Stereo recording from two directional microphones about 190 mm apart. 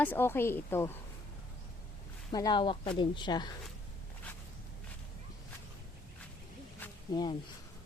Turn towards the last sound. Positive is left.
turn(degrees=20)  # may be behind; listen again after turning